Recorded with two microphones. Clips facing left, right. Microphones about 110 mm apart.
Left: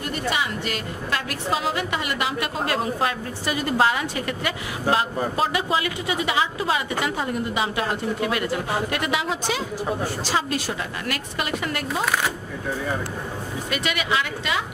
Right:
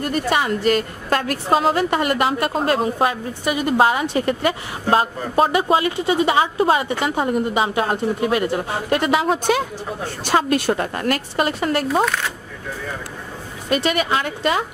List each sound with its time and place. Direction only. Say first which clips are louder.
0.0 s a woman's voice: right 6 dB; 45° right (ahead or behind)
2.6 s a woman's voice: right 4 dB; 25° right (ahead or behind)
6.4 s a woman's voice: right 7 dB; 45° right (ahead or behind)
7.2 s a woman's voice: right 6 dB; 25° right (ahead or behind)
8.9 s a woman's voice: right 7 dB; 35° right (ahead or behind)
13.7 s a woman's voice: right 7 dB; 35° right (ahead or behind)